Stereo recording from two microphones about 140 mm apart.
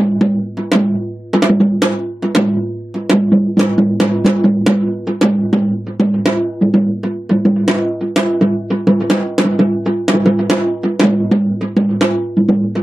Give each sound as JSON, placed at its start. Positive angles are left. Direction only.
{"t": 0.1, "sound": "percussion", "side_deg": 0}
{"t": 3.1, "sound": "music", "side_deg": 0}
{"t": 8.6, "sound": "drum", "side_deg": 0}